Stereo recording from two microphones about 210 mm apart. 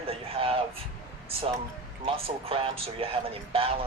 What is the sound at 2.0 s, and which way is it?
Speech, 25° right (ahead or behind).